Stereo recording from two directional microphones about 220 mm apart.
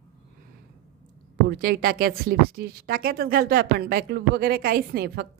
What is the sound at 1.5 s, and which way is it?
Speech, 45° right (ahead or behind).